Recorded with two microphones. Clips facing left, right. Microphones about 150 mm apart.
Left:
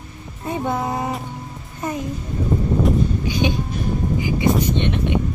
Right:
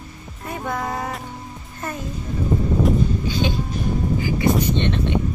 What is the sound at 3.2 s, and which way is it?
Music, 15° left (ahead or behind).